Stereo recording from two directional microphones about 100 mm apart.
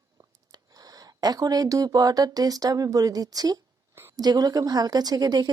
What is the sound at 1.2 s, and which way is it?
Speech, 40° right (ahead or behind).